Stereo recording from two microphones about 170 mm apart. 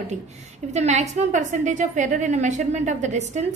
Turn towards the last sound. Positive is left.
turn(degrees=-45)  # may be behind; listen again after turning